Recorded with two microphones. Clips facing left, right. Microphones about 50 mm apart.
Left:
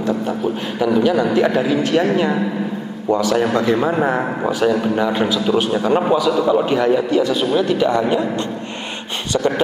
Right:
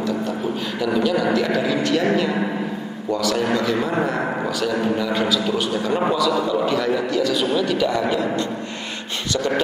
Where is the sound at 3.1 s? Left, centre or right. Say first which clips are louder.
Left 4 dB; centre.